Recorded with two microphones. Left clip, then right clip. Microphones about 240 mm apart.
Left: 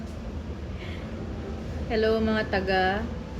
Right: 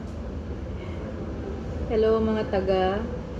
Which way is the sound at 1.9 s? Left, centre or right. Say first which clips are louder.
Right 2 dB; centre.